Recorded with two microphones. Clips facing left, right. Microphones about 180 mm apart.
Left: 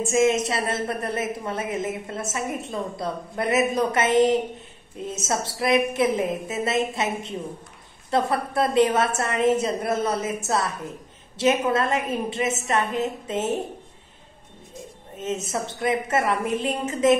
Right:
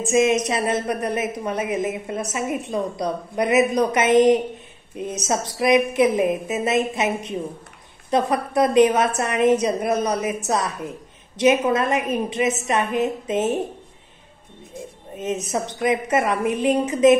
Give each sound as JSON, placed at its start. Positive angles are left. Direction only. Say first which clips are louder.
{"t": 0.0, "sound": "a woman's voice", "louder": "right 2 dB", "side_deg": -15}
{"t": 15.1, "sound": "a woman's voice", "louder": "right 3 dB", "side_deg": -15}